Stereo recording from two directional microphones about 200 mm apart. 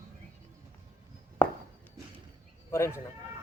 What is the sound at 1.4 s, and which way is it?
Walk, 10° left (ahead or behind).